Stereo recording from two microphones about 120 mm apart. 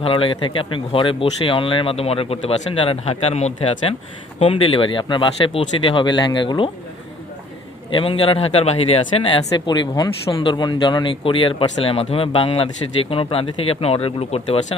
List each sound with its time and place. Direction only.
0.0 s speech: 50° left (ahead or behind)
7.9 s speech: 50° left (ahead or behind)